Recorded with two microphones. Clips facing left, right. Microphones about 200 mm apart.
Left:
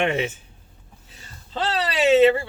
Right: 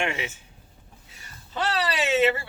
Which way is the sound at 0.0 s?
30° left (ahead or behind).